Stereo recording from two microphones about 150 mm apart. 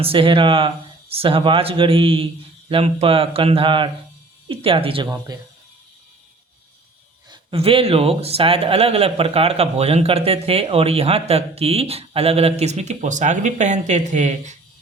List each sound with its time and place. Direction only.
0.0 s speech: 35° right (ahead or behind)
5.0 s speech: 20° right (ahead or behind)
7.3 s speech: 40° right (ahead or behind)